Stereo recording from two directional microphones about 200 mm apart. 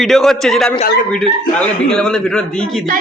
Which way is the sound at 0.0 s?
Centre (ahead or behind).